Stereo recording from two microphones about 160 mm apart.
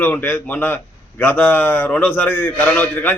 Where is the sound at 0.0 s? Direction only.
10° left (ahead or behind).